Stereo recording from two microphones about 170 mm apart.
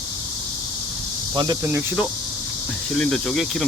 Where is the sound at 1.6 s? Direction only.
15° right (ahead or behind).